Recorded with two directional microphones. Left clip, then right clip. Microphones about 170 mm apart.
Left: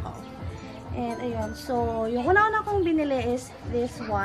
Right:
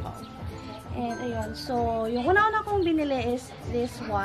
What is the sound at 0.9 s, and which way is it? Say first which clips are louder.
A woman's voice: left 1 dB; 10° left (ahead or behind).